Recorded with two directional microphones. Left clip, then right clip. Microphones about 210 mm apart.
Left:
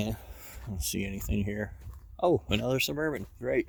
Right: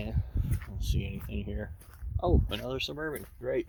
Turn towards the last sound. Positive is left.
turn(degrees=45)  # may be behind; listen again after turning